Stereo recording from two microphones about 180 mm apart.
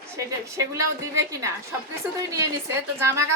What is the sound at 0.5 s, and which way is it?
A woman's voice, 15° right (ahead or behind).